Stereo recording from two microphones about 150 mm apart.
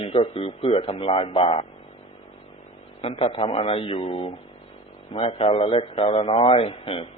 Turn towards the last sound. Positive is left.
turn(degrees=40)  # may be behind; listen again after turning